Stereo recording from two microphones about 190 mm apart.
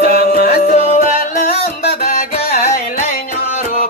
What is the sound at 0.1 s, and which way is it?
Music, 50° left (ahead or behind).